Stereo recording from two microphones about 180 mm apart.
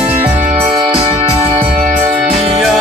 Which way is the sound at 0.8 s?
30° right (ahead or behind).